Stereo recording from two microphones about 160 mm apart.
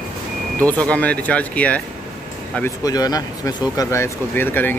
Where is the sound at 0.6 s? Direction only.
10° left (ahead or behind).